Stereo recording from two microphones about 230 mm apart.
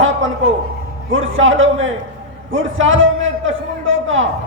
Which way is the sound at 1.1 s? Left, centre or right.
Right.